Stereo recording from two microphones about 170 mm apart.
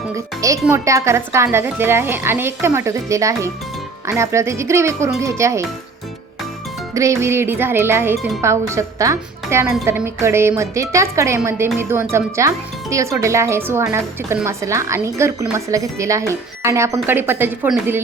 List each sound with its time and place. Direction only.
0.7 s a woman's voice: 15° right (ahead or behind)
6.9 s a woman's voice: 15° right (ahead or behind)